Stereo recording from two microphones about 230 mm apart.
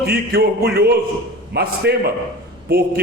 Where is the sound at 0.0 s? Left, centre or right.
Right.